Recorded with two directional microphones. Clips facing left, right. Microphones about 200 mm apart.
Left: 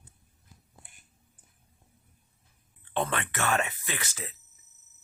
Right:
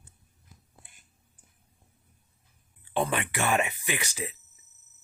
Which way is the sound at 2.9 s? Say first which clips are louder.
Right 2 dB; 10° right (ahead or behind).